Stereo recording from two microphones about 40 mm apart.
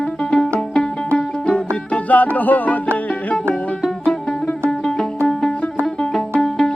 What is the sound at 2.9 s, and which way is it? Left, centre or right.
Music, left.